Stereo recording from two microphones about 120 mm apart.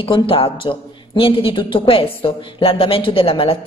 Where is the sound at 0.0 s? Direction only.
45° left (ahead or behind).